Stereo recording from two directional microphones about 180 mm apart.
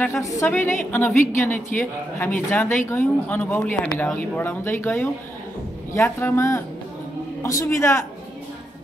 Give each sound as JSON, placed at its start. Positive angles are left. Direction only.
{"t": 0.0, "sound": "speech", "side_deg": 15}